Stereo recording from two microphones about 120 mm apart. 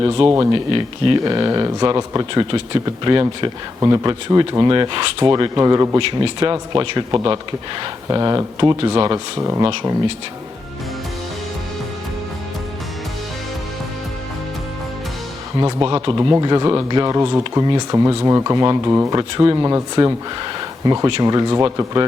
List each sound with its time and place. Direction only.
0.0 s speech: 50° right (ahead or behind)
5.2 s speech: 35° right (ahead or behind)
6.0 s speech: 50° right (ahead or behind)
6.4 s speech: 35° right (ahead or behind)
9.4 s speech: 25° right (ahead or behind)
15.6 s speech: 30° right (ahead or behind)
20.4 s a sound: 30° right (ahead or behind)
21.1 s speech: 35° right (ahead or behind)